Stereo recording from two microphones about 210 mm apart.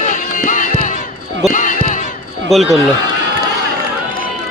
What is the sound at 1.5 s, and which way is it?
Basketball bounce, 40° left (ahead or behind).